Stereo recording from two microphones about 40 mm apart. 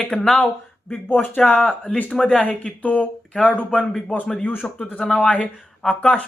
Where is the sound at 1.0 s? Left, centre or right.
Left.